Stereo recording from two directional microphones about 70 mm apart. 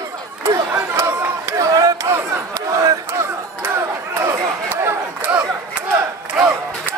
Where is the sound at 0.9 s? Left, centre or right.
Right.